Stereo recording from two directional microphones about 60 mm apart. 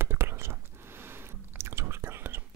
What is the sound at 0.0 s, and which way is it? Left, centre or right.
Chewing, right.